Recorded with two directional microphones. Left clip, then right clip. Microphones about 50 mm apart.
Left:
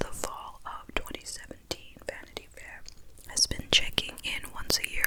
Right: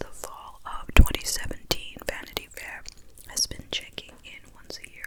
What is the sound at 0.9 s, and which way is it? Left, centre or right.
Whispering, right.